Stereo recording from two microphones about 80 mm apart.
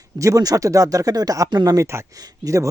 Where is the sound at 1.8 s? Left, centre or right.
Right.